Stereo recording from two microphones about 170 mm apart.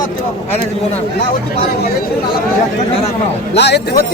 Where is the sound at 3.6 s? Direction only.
75° left (ahead or behind).